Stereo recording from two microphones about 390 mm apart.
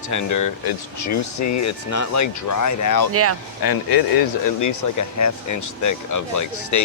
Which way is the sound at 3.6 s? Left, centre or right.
Left.